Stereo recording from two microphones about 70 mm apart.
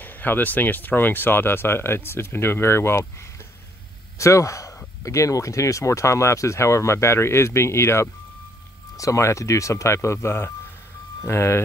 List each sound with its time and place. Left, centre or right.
0.0 s speech: left